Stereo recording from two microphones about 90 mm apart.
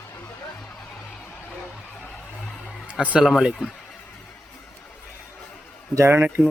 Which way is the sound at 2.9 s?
15° right (ahead or behind).